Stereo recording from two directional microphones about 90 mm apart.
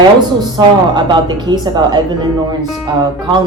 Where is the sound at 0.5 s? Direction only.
55° right (ahead or behind).